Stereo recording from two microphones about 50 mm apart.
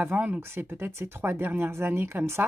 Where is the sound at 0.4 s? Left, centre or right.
Right.